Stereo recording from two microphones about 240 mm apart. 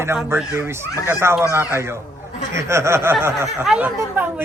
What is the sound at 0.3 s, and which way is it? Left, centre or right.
Speech, centre.